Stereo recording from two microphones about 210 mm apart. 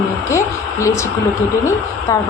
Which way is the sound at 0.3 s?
15° left (ahead or behind).